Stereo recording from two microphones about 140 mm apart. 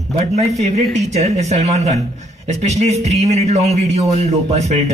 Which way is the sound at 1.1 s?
50° right (ahead or behind).